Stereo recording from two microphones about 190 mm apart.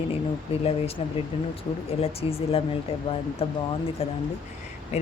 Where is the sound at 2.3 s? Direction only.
30° left (ahead or behind).